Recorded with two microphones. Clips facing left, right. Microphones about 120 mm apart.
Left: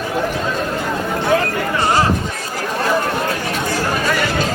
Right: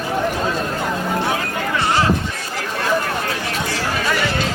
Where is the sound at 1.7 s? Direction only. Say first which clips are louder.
Left 2 dB; 40° left (ahead or behind).